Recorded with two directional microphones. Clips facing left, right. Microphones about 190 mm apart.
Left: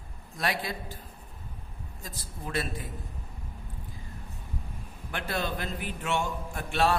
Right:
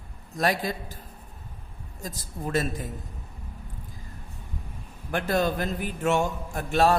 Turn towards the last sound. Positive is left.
turn(degrees=-40)  # may be behind; listen again after turning